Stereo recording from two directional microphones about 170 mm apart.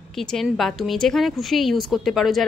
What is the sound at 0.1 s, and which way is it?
A woman's voice, centre (ahead or behind).